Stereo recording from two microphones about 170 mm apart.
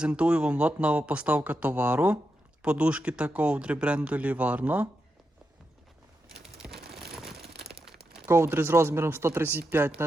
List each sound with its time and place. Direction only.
0.0 s speech: 5° right (ahead or behind)
6.2 s a sound: centre (ahead or behind)
7.5 s crumpling: 70° right (ahead or behind)
8.3 s speech: 15° right (ahead or behind)